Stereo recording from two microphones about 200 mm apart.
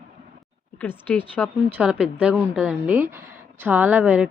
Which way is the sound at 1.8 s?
5° right (ahead or behind).